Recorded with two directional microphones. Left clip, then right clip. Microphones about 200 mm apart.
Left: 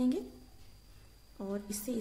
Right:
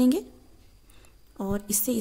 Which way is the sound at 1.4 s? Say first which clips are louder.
Right 9 dB; 45° right (ahead or behind).